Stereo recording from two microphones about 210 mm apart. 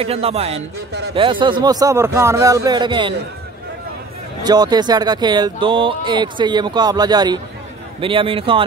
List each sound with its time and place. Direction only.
0.0 s speech: 30° right (ahead or behind)
4.4 s speech: 20° right (ahead or behind)